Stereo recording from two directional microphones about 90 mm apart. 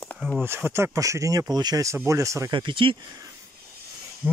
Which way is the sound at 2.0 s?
35° right (ahead or behind).